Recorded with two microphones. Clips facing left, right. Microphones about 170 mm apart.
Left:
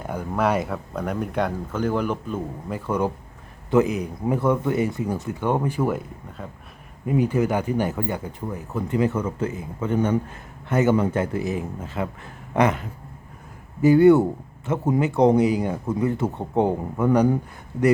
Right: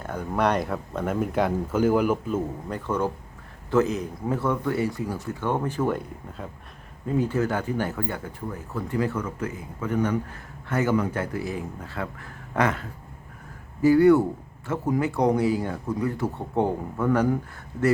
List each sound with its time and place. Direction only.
0.0 s speech: 10° left (ahead or behind); by 2.4 s 5° right (ahead or behind)
2.6 s speech: 10° left (ahead or behind)
7.0 s speech: 15° left (ahead or behind)